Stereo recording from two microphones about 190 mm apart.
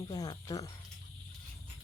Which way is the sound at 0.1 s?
20° left (ahead or behind).